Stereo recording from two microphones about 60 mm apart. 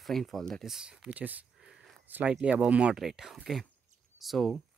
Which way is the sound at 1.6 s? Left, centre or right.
Centre.